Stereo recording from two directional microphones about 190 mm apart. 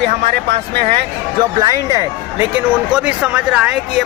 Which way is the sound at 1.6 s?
20° right (ahead or behind).